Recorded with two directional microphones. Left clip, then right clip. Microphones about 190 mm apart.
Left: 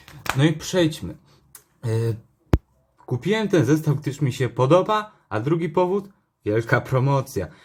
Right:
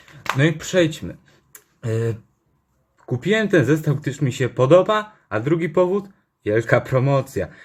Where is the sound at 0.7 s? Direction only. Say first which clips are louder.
Right 3 dB; 10° left (ahead or behind).